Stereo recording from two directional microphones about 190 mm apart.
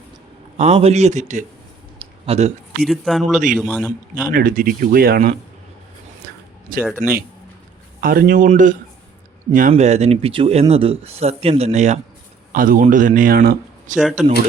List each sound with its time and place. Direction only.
0.5 s speech: 35° right (ahead or behind)
2.0 s a sound: 30° right (ahead or behind)
2.8 s speech: centre (ahead or behind)
4.1 s speech: 45° right (ahead or behind)
6.8 s speech: 10° right (ahead or behind)
8.0 s speech: 50° right (ahead or behind)
12.5 s speech: 45° right (ahead or behind)
14.0 s speech: centre (ahead or behind)